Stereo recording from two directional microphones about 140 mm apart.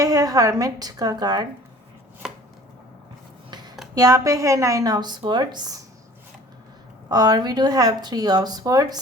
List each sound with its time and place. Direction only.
0.0 s speech: 25° right (ahead or behind)
2.2 s chopping: 5° right (ahead or behind)
3.5 s a sound: 30° right (ahead or behind)
3.9 s speech: 25° right (ahead or behind)
7.1 s speech: 30° right (ahead or behind)